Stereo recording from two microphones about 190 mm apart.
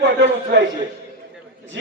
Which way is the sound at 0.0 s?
70° right (ahead or behind).